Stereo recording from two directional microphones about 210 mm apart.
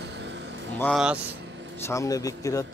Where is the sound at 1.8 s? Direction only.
15° left (ahead or behind).